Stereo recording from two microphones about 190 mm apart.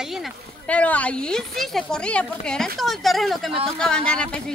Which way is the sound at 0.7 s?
5° left (ahead or behind).